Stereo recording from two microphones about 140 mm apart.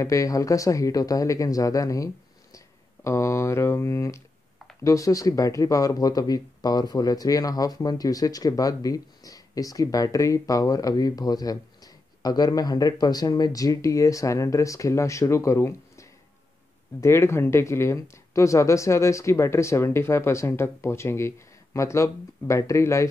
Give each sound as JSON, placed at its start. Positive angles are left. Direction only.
{"t": 0.0, "sound": "speech", "side_deg": 25}
{"t": 2.5, "sound": "a sound", "side_deg": 20}
{"t": 4.8, "sound": "speech", "side_deg": 25}